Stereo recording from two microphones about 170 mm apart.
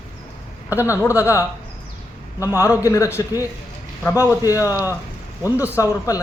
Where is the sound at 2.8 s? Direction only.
20° left (ahead or behind).